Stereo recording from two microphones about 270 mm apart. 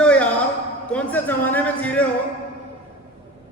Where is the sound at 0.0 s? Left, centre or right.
Centre.